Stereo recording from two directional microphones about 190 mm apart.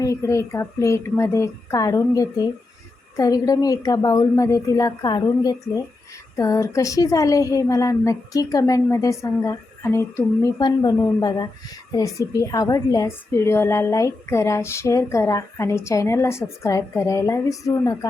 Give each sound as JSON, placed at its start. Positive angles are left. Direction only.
{"t": 0.0, "sound": "a woman's voice", "side_deg": 15}